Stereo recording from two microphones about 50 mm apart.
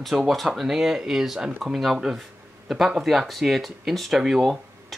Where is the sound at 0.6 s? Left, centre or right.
Centre.